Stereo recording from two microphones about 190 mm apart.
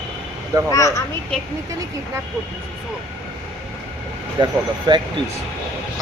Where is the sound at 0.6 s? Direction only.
15° left (ahead or behind).